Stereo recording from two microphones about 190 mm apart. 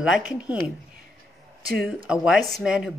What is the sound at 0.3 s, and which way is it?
Speech, 5° right (ahead or behind).